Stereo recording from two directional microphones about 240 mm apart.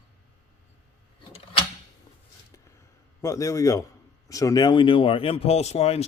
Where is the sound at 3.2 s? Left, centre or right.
Centre.